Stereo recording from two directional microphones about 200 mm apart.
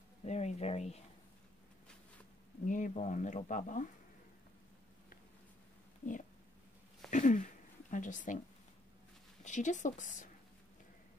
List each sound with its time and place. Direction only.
0.2 s speech: 35° left (ahead or behind)
2.6 s speech: 40° left (ahead or behind)
6.0 s speech: 35° left (ahead or behind)
7.1 s a sound: 40° left (ahead or behind)
7.9 s speech: 40° left (ahead or behind)
9.4 s speech: 35° left (ahead or behind)